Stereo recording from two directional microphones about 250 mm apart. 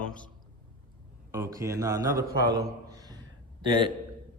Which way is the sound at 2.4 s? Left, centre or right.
Centre.